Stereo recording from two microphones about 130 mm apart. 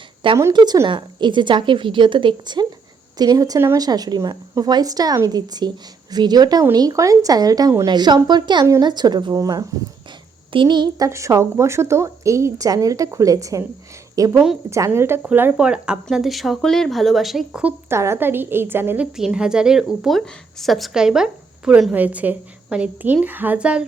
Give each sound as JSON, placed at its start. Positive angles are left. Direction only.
{"t": 0.5, "sound": "a woman's voice", "side_deg": -30}
{"t": 14.3, "sound": "a woman's voice", "side_deg": -5}
{"t": 14.7, "sound": "speech", "side_deg": -20}
{"t": 19.1, "sound": "speech", "side_deg": -5}